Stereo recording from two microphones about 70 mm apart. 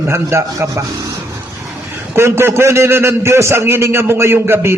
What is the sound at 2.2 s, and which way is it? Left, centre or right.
A man's voice, right.